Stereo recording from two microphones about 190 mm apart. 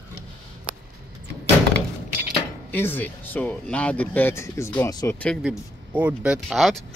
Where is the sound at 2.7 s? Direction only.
10° left (ahead or behind).